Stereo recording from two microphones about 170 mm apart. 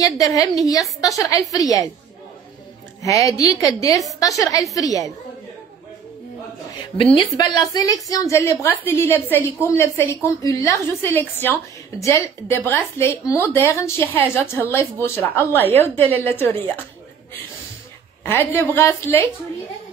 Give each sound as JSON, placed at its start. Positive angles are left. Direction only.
{"t": 0.0, "sound": "a woman's voice", "side_deg": 20}
{"t": 3.0, "sound": "a woman's voice", "side_deg": 20}
{"t": 7.0, "sound": "a woman's voice", "side_deg": 30}
{"t": 18.2, "sound": "a woman's voice", "side_deg": 10}